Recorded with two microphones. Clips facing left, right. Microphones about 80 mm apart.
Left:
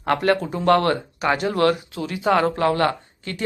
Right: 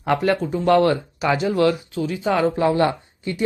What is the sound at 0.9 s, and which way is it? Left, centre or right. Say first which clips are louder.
Speech: right 1 dB; left.